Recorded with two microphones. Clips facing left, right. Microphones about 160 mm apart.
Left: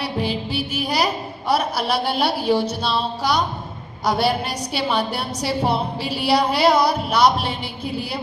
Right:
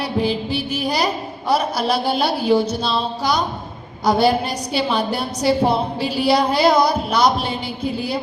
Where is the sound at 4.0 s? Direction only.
Centre (ahead or behind).